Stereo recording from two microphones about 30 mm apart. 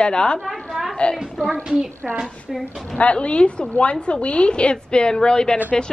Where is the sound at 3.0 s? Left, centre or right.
Left.